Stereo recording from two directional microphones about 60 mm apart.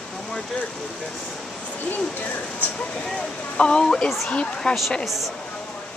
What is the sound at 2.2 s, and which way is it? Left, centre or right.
Speech, left.